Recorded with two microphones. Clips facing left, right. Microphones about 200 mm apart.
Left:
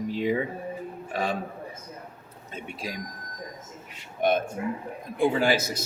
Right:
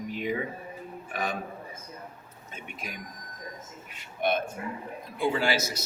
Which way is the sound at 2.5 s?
30° left (ahead or behind).